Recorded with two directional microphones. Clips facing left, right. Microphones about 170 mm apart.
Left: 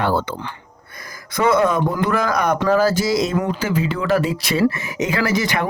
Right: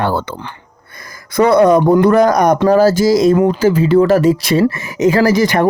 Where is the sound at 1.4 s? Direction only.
40° right (ahead or behind).